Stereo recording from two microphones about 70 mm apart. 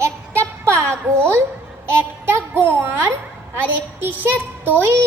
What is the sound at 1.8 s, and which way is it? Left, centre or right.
A child's voice, right.